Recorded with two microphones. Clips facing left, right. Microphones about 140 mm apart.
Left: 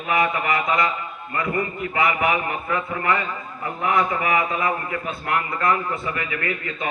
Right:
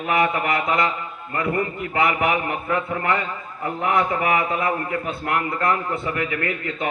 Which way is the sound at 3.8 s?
60° right (ahead or behind).